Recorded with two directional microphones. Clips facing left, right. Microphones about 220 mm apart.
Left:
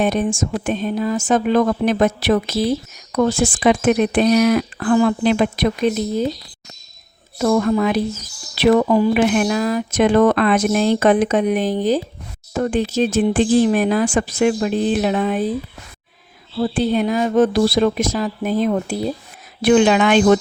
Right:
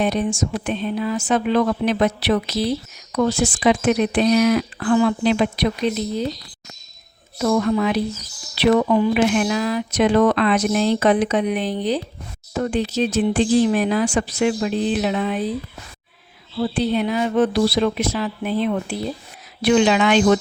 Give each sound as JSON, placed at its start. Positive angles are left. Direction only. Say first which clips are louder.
{"t": 0.0, "sound": "speech", "louder": "left 2 dB", "side_deg": 50}
{"t": 7.3, "sound": "speech", "louder": "left 2 dB", "side_deg": 45}
{"t": 16.6, "sound": "speech", "louder": "left 2 dB", "side_deg": 50}